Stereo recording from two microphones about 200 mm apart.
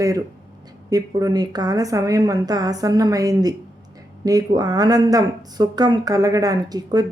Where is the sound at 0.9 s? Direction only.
20° right (ahead or behind).